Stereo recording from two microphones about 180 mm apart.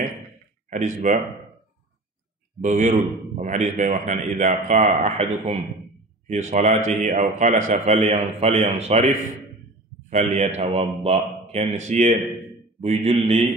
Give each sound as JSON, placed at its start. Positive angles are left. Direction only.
{"t": 0.7, "sound": "a man's voice", "side_deg": -40}
{"t": 2.6, "sound": "a man's voice", "side_deg": -40}